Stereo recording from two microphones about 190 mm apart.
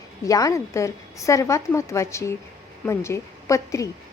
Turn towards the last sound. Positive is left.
turn(degrees=15)  # may be behind; listen again after turning